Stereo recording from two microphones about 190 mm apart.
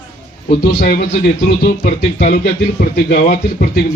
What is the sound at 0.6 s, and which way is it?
Speech, 60° left (ahead or behind).